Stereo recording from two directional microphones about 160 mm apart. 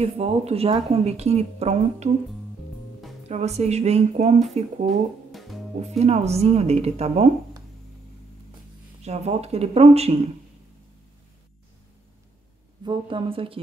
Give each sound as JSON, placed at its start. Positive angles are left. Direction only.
{"t": 0.0, "sound": "speech", "side_deg": -40}
{"t": 3.3, "sound": "speech", "side_deg": -45}
{"t": 4.8, "sound": "music", "side_deg": 0}
{"t": 5.8, "sound": "speech", "side_deg": -45}
{"t": 9.0, "sound": "speech", "side_deg": -40}
{"t": 12.8, "sound": "speech", "side_deg": -30}